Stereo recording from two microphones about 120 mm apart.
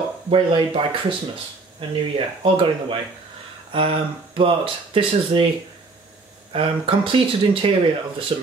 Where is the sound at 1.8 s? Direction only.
50° right (ahead or behind).